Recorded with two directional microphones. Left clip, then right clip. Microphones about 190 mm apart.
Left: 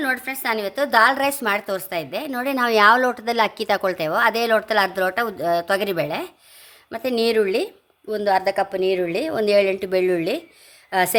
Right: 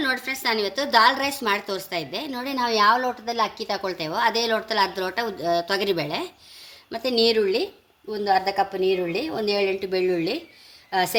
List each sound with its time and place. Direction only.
0.0 s a woman's voice: 40° left (ahead or behind)